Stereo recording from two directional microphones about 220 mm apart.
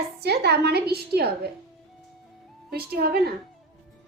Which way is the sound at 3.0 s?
45° right (ahead or behind).